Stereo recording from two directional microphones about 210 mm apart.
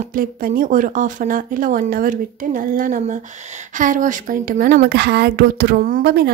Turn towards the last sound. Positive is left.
turn(degrees=-50)  # may be behind; listen again after turning